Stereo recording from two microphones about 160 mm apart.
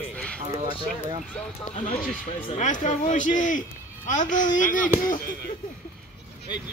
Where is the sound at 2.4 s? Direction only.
50° left (ahead or behind).